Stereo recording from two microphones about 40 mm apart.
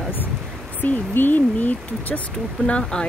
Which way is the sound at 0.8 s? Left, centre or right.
Left.